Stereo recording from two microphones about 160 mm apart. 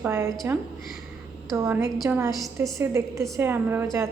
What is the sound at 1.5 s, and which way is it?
A woman's voice, 20° right (ahead or behind).